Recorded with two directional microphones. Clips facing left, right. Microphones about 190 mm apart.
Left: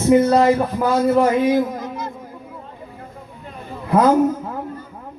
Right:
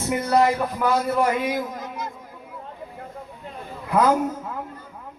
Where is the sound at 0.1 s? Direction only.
25° left (ahead or behind).